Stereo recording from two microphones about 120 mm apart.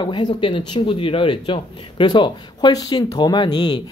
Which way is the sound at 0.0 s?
40° left (ahead or behind).